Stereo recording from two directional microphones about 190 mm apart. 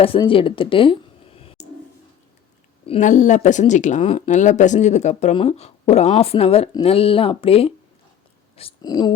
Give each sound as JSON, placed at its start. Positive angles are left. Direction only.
{"t": 0.0, "sound": "speech", "side_deg": 30}
{"t": 2.8, "sound": "speech", "side_deg": 35}